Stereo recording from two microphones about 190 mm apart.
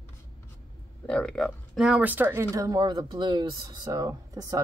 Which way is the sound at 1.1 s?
5° left (ahead or behind).